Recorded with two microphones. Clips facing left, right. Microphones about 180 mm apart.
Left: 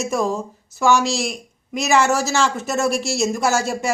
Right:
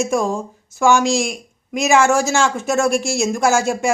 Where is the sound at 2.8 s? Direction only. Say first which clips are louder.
Right 3 dB; 50° right (ahead or behind).